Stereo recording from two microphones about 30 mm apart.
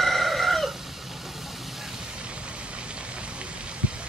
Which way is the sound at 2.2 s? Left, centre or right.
Right.